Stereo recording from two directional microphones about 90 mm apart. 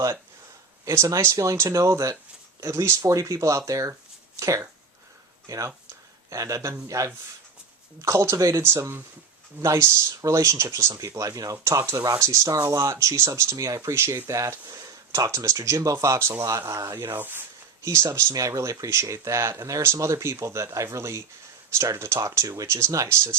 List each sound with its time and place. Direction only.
0.9 s speech: 35° right (ahead or behind)
17.8 s speech: 35° right (ahead or behind)